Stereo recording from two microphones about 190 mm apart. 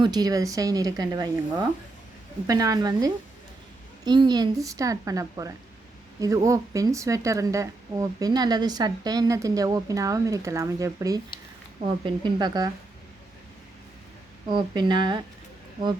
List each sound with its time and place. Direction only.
0.0 s speech: 20° right (ahead or behind)
14.5 s speech: 25° right (ahead or behind)